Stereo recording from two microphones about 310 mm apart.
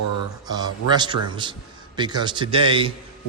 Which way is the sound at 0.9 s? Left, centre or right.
Centre.